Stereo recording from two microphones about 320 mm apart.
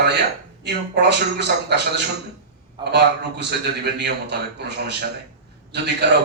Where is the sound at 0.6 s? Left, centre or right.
Right.